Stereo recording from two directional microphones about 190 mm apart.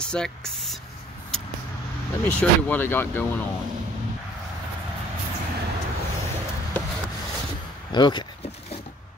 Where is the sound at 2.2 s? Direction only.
10° left (ahead or behind).